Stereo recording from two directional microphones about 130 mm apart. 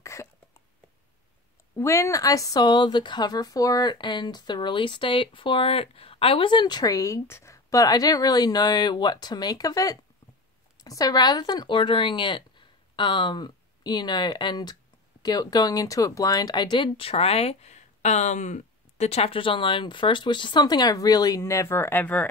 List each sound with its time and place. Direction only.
0.0 s cough: 20° left (ahead or behind)
1.8 s a woman's voice: 20° left (ahead or behind)